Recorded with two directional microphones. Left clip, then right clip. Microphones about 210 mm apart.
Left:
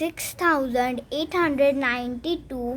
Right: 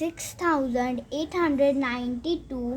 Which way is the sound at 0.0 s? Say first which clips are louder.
Left 4 dB; 40° left (ahead or behind).